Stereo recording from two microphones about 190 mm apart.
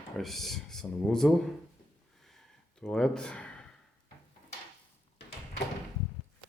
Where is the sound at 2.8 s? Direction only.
5° left (ahead or behind).